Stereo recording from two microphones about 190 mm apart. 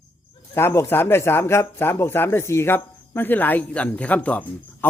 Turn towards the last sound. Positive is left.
turn(degrees=10)  # may be behind; listen again after turning